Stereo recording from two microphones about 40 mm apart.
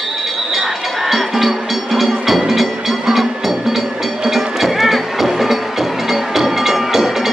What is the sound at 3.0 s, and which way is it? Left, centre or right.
Train, centre.